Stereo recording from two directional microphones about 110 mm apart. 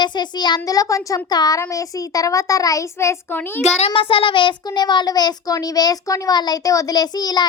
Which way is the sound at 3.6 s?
85° left.